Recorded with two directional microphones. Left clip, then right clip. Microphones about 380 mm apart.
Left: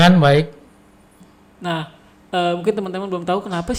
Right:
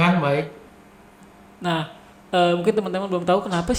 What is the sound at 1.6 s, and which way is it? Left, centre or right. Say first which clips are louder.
Speech: even; centre.